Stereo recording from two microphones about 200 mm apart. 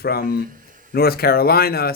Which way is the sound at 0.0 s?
50° left (ahead or behind).